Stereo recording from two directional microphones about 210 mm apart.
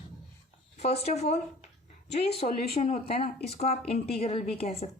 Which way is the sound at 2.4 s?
45° left (ahead or behind).